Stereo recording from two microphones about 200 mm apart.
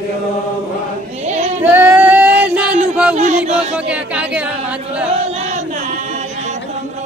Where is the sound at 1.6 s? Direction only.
10° right (ahead or behind).